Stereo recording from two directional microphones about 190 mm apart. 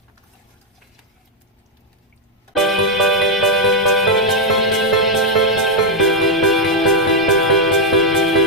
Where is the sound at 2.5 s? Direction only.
Centre (ahead or behind).